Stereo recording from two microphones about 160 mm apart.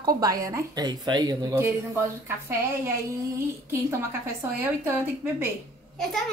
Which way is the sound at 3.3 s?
15° right (ahead or behind).